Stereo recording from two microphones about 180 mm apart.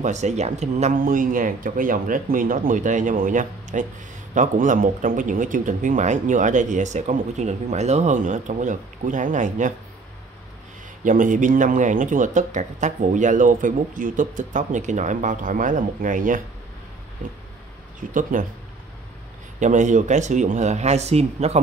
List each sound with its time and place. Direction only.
0.0 s speech: 40° right (ahead or behind)
11.1 s speech: 45° right (ahead or behind)
18.3 s speech: 50° right (ahead or behind)
19.6 s speech: 45° right (ahead or behind)